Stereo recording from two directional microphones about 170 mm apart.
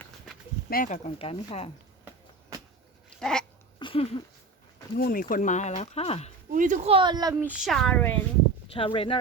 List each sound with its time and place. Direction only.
0.7 s speech: 55° left (ahead or behind)
1.0 s speech: 35° left (ahead or behind)
3.2 s dog: 5° left (ahead or behind)
3.8 s a sound: 30° left (ahead or behind)
4.9 s speech: 55° left (ahead or behind); by 6.3 s 40° left (ahead or behind)
6.5 s speech: 50° right (ahead or behind)
6.8 s speech: 30° right (ahead or behind)
7.4 s speech: 5° right (ahead or behind)
8.7 s speech: 30° left (ahead or behind)